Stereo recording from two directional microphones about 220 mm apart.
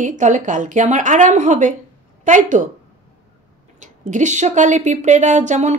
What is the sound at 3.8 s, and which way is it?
A woman's voice, 35° right (ahead or behind).